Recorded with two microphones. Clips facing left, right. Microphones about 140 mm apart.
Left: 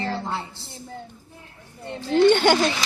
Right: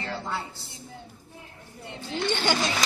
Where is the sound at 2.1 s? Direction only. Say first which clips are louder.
Left 11 dB; 55° left (ahead or behind).